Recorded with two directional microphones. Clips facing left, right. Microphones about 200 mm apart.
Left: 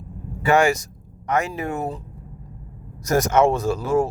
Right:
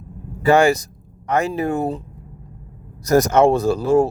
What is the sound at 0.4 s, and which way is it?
Speech, 35° right (ahead or behind).